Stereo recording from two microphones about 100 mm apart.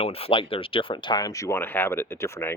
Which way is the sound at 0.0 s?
75° left (ahead or behind).